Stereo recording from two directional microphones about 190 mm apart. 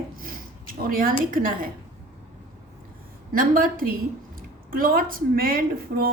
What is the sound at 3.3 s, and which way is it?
Speech, 50° right (ahead or behind).